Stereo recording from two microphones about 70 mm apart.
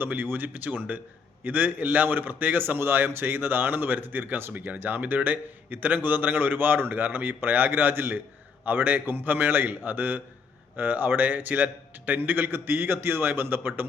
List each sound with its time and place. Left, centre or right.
0.0 s speech: right